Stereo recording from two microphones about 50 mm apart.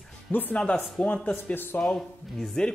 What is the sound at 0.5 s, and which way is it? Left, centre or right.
Speech, left.